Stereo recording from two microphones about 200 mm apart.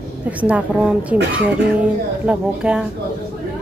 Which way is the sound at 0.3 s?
5° right (ahead or behind).